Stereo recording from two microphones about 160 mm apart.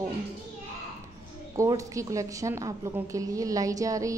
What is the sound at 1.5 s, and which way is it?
A woman's voice, 20° right (ahead or behind).